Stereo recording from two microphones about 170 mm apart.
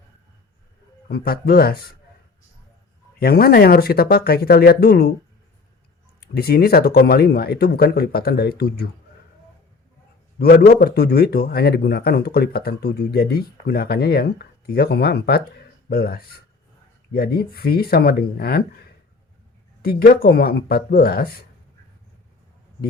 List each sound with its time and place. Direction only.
1.0 s speech: 60° left (ahead or behind)
3.2 s speech: 65° left (ahead or behind)
6.1 s a man's voice: 65° left (ahead or behind)
10.3 s a man's voice: 65° left (ahead or behind)
19.8 s speech: 60° left (ahead or behind)